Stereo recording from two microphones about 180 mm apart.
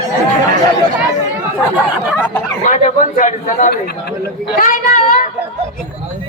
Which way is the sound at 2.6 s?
45° left (ahead or behind).